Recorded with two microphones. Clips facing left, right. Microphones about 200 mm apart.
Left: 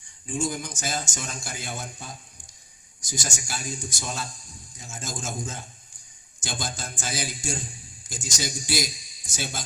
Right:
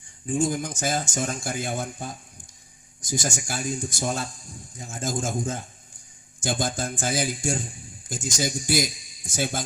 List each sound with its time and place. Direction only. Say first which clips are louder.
0.3 s a man's voice: right 5 dB; 55° right (ahead or behind)